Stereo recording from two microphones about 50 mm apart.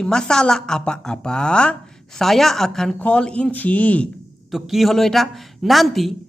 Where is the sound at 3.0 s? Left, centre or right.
Left.